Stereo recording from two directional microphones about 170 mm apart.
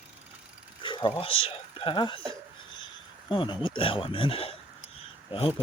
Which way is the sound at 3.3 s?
30° left (ahead or behind).